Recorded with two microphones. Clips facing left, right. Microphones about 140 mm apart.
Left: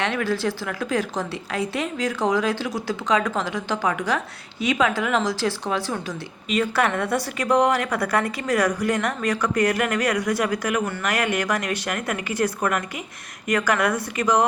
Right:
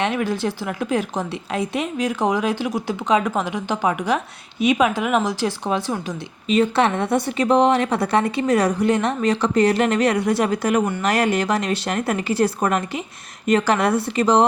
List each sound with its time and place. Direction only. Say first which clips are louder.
0.0 s a woman's voice: right 2 dB; 20° right (ahead or behind)